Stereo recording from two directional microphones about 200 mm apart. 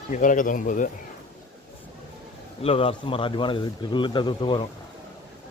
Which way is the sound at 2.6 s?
30° left (ahead or behind).